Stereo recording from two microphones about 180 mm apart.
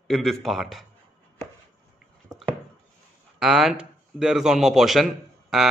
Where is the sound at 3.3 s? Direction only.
5° right (ahead or behind).